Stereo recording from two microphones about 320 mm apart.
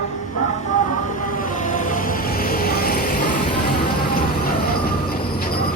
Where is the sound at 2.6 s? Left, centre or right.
Left.